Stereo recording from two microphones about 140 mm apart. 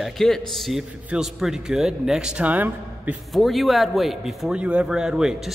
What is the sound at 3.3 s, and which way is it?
A man's voice, centre (ahead or behind).